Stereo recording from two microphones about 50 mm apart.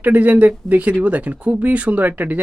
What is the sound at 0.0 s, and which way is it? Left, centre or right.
Speech, right.